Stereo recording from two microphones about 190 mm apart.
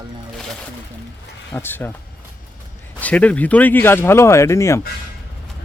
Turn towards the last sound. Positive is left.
turn(degrees=15)  # may be behind; listen again after turning